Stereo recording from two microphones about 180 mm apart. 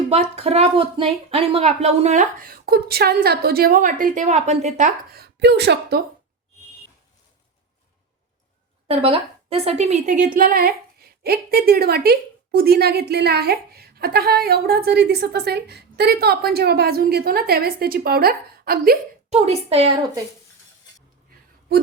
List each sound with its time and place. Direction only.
0.1 s speech: 35° right (ahead or behind)
5.1 s a woman's voice: 65° right (ahead or behind)
8.9 s a woman's voice: 30° right (ahead or behind); by 18.9 s 55° right (ahead or behind)
19.3 s a woman's voice: 35° right (ahead or behind)